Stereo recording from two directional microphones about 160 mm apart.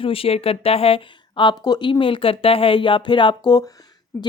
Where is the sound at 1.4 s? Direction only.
25° left (ahead or behind).